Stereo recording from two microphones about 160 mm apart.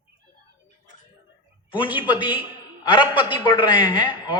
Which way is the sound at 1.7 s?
30° left (ahead or behind).